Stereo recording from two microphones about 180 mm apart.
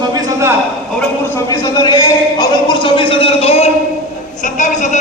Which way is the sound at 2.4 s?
25° left (ahead or behind).